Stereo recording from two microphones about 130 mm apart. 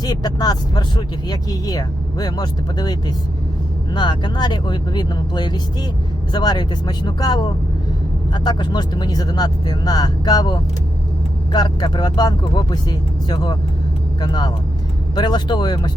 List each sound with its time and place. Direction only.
0.0 s speech: 30° left (ahead or behind)